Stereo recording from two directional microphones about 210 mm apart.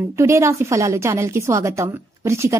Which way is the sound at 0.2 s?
15° right (ahead or behind).